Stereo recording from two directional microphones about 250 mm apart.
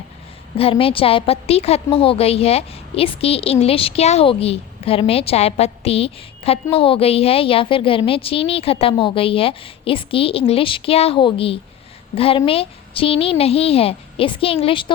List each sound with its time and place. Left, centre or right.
0.5 s a woman's voice: left